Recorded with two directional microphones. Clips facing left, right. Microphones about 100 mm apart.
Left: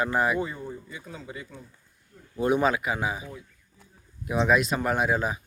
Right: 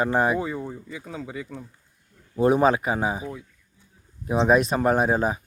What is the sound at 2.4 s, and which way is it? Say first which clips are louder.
Speech: right 5 dB; 35° right (ahead or behind).